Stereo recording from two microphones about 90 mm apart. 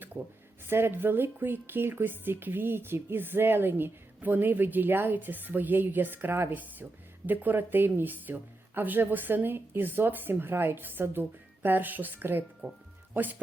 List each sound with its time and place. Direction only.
0.7 s a woman's voice: 25° right (ahead or behind)